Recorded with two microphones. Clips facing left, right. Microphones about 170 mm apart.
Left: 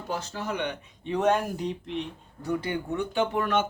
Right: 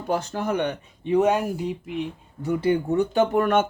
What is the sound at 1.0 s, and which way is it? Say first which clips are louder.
Speech: right 4 dB; 15° right (ahead or behind).